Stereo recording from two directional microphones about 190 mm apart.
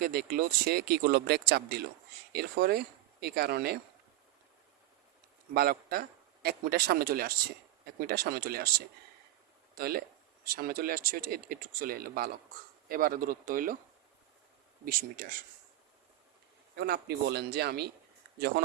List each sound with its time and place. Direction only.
0.0 s speech: 55° right (ahead or behind)
5.5 s a man's voice: 55° right (ahead or behind)
9.7 s speech: 50° right (ahead or behind)
14.8 s speech: 50° right (ahead or behind)
16.7 s speech: 60° right (ahead or behind)